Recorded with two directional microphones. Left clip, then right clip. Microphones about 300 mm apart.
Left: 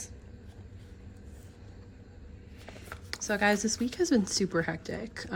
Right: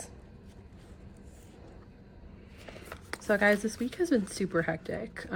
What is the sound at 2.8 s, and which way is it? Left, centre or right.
Speech, centre.